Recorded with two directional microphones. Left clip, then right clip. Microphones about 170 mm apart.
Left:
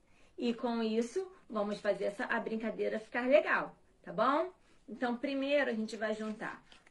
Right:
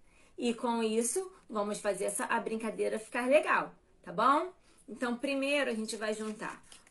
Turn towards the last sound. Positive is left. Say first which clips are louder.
# right 1 dB
turn(degrees=-30)  # may be behind; listen again after turning